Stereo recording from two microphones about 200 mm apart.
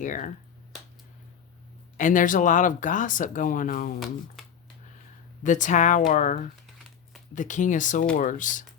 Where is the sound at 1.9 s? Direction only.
40° left (ahead or behind).